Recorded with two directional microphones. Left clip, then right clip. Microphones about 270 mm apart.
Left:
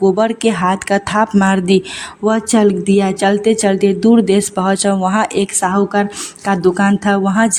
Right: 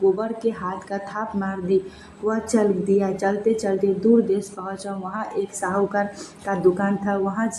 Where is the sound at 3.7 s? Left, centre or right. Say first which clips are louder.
Left 6 dB; left.